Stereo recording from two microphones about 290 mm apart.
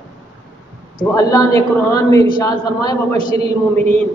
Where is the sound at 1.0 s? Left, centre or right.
Centre.